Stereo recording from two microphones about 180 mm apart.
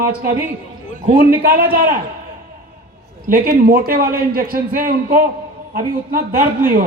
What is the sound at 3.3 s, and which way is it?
A man's voice, 55° right (ahead or behind).